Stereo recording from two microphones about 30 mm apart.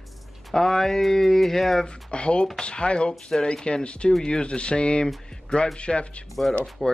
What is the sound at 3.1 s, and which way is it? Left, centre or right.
Speech, left.